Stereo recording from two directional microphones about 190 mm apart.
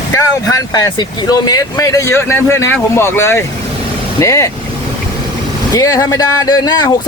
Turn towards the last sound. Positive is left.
turn(degrees=20)  # may be behind; listen again after turning